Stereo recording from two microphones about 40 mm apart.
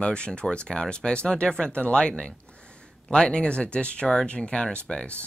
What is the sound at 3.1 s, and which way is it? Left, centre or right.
Speech, left.